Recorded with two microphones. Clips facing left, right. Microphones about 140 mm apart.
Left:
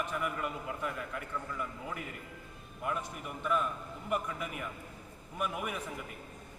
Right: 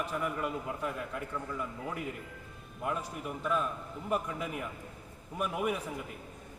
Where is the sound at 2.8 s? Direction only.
30° right (ahead or behind).